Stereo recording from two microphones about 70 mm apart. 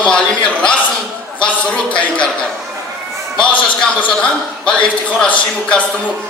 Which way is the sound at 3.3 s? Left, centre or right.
Centre.